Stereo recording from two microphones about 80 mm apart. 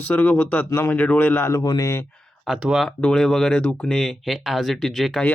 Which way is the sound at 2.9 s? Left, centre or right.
Centre.